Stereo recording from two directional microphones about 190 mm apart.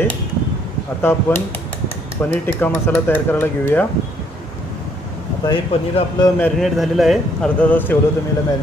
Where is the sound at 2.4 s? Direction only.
10° left (ahead or behind).